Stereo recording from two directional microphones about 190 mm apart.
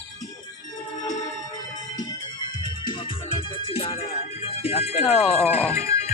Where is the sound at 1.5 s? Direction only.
20° left (ahead or behind).